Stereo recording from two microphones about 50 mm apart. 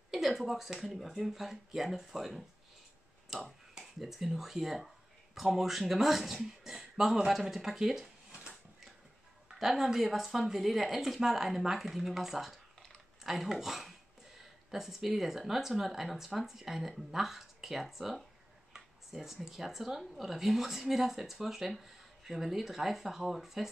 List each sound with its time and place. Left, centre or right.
0.1 s speech: centre
8.3 s a sound: centre
9.6 s speech: centre